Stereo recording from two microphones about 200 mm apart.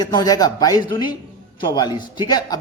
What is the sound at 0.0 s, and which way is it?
Speech, 20° left (ahead or behind).